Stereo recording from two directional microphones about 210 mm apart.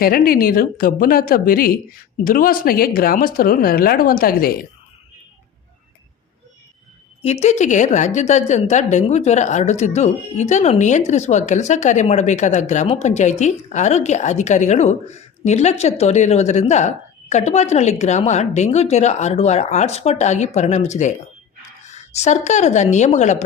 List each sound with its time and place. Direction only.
0.0 s speech: 45° left (ahead or behind)
7.2 s a woman's voice: 30° left (ahead or behind)